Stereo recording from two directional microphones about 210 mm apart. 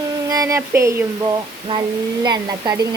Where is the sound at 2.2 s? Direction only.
20° right (ahead or behind).